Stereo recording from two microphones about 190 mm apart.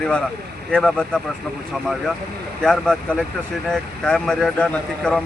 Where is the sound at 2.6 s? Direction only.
5° left (ahead or behind).